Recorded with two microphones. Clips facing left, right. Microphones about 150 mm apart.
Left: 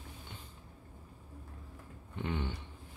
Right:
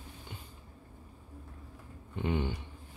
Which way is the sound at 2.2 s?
15° right (ahead or behind).